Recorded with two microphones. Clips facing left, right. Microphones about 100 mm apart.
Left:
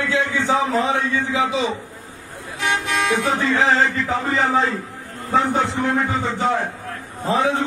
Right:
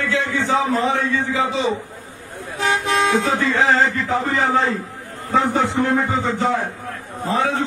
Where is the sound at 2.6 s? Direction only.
30° right (ahead or behind).